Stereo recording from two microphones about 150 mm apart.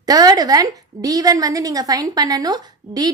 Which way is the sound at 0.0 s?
25° right (ahead or behind).